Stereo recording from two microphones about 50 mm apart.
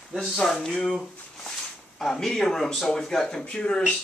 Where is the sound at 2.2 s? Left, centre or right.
Centre.